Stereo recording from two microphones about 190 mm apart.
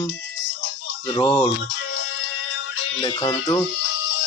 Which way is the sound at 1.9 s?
90° left.